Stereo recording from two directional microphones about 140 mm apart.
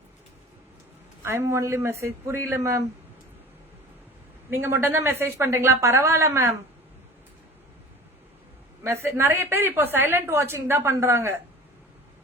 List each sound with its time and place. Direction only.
1.2 s a man's voice: 20° right (ahead or behind)
4.5 s a woman's voice: 15° right (ahead or behind)
8.8 s a woman's voice: 20° right (ahead or behind)